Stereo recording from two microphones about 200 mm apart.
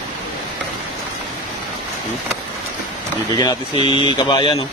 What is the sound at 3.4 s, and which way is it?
Speech, 20° left (ahead or behind).